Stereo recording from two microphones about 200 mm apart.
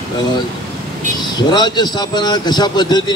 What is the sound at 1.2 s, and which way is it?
A man's voice, 20° left (ahead or behind).